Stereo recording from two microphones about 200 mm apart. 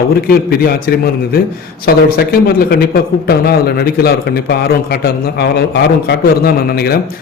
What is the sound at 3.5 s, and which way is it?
A man's voice, 50° left (ahead or behind).